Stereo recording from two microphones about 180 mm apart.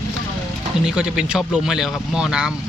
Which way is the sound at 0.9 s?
5° right (ahead or behind).